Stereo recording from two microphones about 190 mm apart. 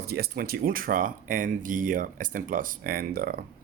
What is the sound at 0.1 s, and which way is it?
Speech, 55° right (ahead or behind).